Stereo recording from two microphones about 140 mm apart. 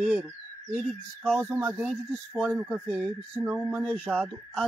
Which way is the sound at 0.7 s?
5° left (ahead or behind).